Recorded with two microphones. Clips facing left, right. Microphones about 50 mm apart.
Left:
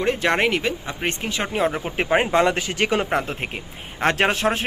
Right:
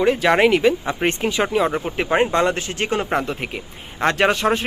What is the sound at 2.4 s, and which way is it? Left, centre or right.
Speech, left.